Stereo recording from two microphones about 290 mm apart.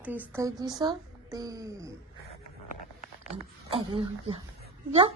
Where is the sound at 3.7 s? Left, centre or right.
Centre.